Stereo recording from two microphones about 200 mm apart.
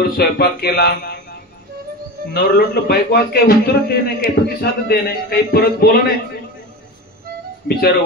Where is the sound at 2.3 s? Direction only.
50° left (ahead or behind).